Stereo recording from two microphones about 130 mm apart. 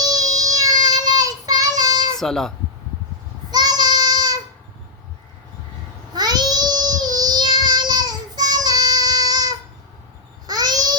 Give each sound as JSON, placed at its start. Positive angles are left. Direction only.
{"t": 0.0, "sound": "child singing", "side_deg": -30}
{"t": 2.1, "sound": "speech", "side_deg": 5}
{"t": 3.5, "sound": "child singing", "side_deg": -30}
{"t": 6.1, "sound": "child singing", "side_deg": -30}
{"t": 10.4, "sound": "babbling", "side_deg": -30}